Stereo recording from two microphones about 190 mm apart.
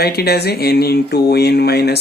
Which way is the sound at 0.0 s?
55° left (ahead or behind).